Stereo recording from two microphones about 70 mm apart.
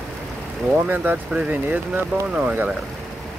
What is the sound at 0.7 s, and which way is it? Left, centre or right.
Speech, right.